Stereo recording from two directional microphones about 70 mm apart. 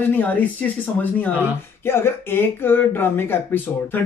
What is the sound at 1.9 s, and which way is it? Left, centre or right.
Speech, left.